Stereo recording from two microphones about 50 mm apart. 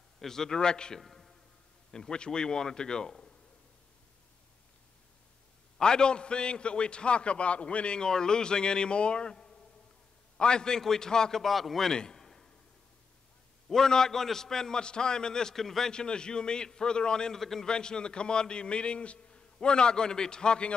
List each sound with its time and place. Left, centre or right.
0.2 s a man's voice: centre
1.0 s music: centre
1.9 s a man's voice: centre
5.8 s a man's voice: centre
11.4 s a man's voice: centre
11.9 s a sound: centre
13.7 s a man's voice: centre